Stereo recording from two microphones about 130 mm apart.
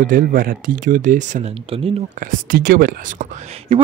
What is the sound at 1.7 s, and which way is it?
Speech, 45° right (ahead or behind).